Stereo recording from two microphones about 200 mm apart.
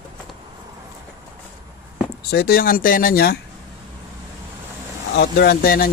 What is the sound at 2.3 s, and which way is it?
Speech, 50° left (ahead or behind).